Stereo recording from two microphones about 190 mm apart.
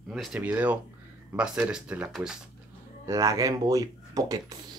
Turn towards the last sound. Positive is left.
turn(degrees=-20)  # may be behind; listen again after turning